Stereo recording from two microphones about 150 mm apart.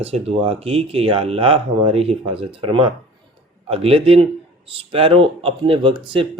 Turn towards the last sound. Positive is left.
turn(degrees=-35)  # may be behind; listen again after turning